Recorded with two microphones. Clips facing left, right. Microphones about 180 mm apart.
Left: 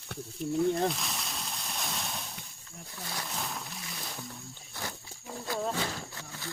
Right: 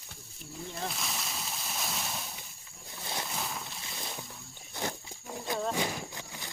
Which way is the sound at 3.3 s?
Centre (ahead or behind).